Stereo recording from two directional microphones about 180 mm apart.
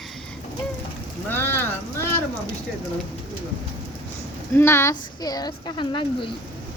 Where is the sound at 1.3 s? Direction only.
10° left (ahead or behind).